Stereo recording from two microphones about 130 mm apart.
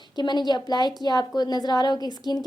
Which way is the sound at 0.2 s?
35° left (ahead or behind).